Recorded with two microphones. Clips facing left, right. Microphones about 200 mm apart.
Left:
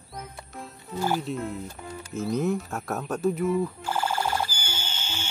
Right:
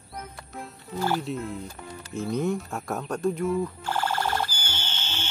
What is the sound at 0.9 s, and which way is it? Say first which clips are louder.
Speech: even; 15° left (ahead or behind).